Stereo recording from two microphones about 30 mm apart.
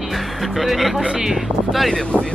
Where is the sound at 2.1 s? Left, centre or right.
Left.